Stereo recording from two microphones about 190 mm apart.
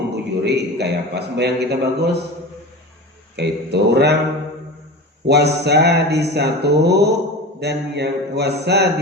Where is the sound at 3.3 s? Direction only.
60° right (ahead or behind).